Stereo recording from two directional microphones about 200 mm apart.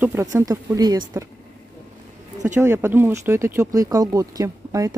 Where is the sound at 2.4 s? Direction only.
15° right (ahead or behind).